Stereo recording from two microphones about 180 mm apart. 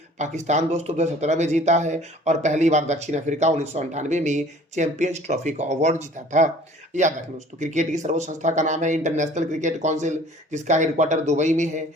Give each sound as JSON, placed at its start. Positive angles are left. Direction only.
{"t": 0.2, "sound": "speech", "side_deg": -40}